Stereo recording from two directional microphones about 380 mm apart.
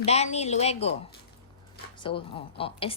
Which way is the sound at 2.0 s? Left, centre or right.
Centre.